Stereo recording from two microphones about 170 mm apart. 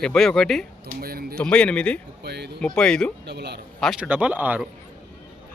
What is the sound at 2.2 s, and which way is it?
Speech, 75° right (ahead or behind).